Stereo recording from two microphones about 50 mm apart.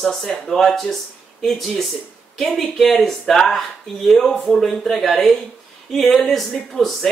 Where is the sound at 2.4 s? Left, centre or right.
Centre.